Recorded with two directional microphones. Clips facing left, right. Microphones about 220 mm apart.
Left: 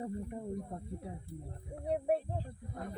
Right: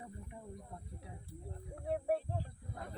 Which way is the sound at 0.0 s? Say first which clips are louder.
Left 11 dB; 45° left (ahead or behind).